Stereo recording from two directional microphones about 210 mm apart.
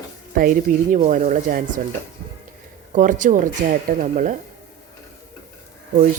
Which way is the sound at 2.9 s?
40° right (ahead or behind).